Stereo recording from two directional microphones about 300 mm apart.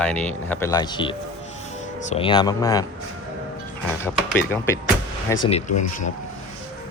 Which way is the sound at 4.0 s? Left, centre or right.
Centre.